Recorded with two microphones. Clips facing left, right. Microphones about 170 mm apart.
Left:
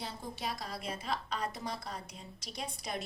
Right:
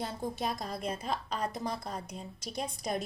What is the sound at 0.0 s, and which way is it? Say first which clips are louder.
A woman's voice: right 6 dB; 50° right (ahead or behind).